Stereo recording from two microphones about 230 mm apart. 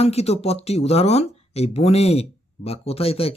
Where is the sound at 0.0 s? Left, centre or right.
Left.